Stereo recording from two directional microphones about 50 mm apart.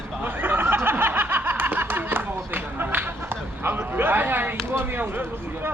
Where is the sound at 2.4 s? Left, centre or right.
Right.